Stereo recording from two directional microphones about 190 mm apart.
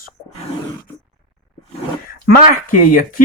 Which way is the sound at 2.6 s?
45° left (ahead or behind).